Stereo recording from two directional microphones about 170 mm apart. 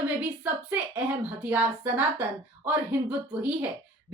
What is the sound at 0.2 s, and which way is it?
Speech, 10° right (ahead or behind).